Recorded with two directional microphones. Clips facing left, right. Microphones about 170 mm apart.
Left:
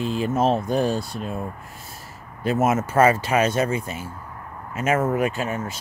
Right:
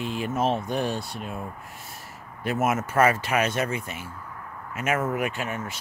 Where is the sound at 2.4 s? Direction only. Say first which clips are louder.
Left 4 dB; 25° left (ahead or behind).